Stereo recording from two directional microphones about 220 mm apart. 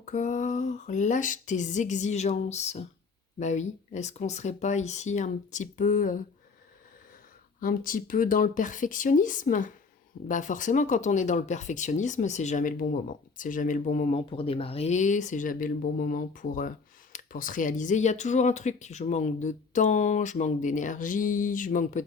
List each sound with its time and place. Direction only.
0.0 s speech: 35° left (ahead or behind)
7.6 s speech: 40° left (ahead or behind)